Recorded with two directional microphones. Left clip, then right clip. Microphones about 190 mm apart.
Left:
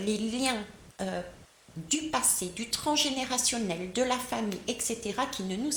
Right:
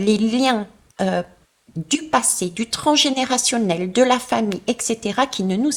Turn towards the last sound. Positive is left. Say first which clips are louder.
# right 12 dB
turn(degrees=-50)  # may be behind; listen again after turning